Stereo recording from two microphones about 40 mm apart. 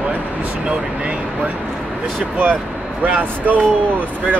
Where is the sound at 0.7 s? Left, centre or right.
Right.